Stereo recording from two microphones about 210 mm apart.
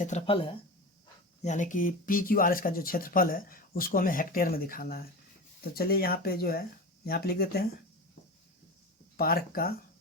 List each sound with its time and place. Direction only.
0.0 s speech: 30° left (ahead or behind); by 7.7 s 50° left (ahead or behind)
9.1 s speech: 45° left (ahead or behind)